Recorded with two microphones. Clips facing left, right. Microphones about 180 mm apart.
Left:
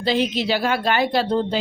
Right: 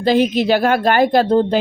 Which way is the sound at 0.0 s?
50° right (ahead or behind).